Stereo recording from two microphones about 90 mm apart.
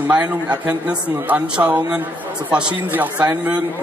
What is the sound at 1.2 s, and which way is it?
Speech, 20° right (ahead or behind).